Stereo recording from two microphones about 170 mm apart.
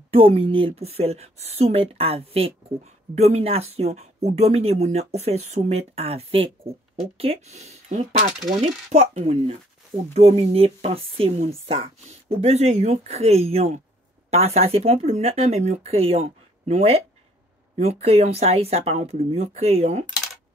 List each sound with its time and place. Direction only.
0.1 s speech: 35° right (ahead or behind)